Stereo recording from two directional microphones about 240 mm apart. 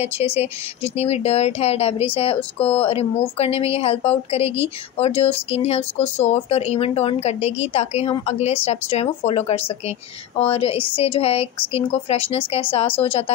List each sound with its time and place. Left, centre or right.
0.0 s speech: left